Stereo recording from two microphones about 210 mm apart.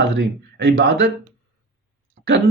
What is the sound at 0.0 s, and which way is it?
Speech, 55° right (ahead or behind).